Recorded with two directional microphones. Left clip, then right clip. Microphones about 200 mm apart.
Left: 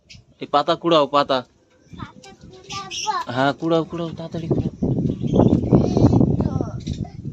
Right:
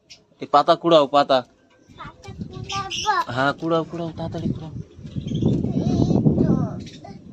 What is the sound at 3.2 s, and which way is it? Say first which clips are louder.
Speech: left 2 dB; 20° left (ahead or behind).